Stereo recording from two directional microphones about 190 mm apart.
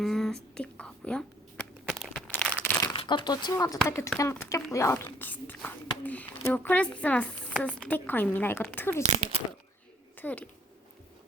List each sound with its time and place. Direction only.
0.0 s speech: centre (ahead or behind)
0.5 s whispering: 5° left (ahead or behind)
2.9 s a woman's voice: 25° left (ahead or behind); by 9.0 s 10° left (ahead or behind)
9.0 s a child's voice: 35° right (ahead or behind)
10.2 s speech: 10° left (ahead or behind)